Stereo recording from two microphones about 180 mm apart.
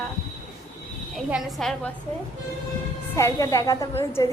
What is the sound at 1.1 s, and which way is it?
Speech, centre (ahead or behind).